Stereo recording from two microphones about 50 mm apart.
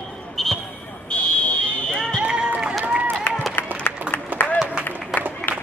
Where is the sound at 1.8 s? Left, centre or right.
Centre.